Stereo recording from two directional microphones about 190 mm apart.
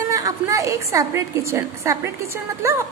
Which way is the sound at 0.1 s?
15° right (ahead or behind).